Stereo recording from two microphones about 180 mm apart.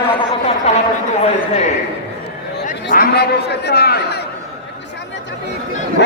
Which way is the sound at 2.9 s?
60° left (ahead or behind).